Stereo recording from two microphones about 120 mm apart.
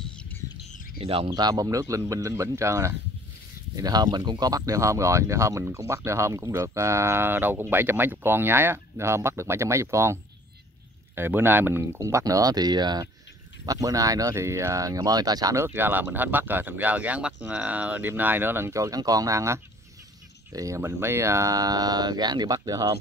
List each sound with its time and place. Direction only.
0.9 s speech: 50° right (ahead or behind)
1.3 s speech: 30° right (ahead or behind)
3.7 s speech: 35° right (ahead or behind)
11.1 s speech: 20° right (ahead or behind)